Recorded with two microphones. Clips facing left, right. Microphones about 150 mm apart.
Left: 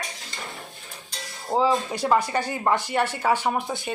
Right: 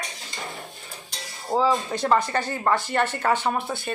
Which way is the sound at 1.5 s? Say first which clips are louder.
Even; 5° left (ahead or behind).